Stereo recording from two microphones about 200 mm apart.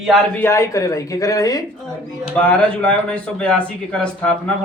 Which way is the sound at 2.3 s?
5° left (ahead or behind).